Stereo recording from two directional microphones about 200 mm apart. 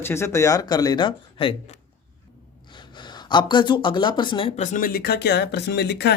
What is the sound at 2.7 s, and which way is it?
Speech, 25° left (ahead or behind).